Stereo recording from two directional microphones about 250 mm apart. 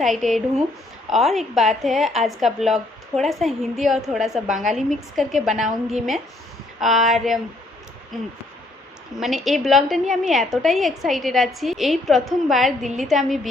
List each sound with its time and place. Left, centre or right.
0.0 s a woman's voice: centre